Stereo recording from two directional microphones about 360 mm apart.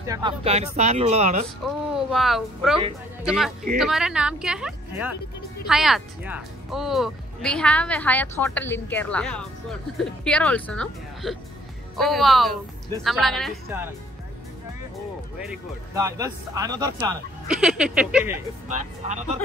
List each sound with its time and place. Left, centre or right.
0.0 s speech: centre
1.7 s speech: centre
15.9 s speech: centre
18.7 s speech: centre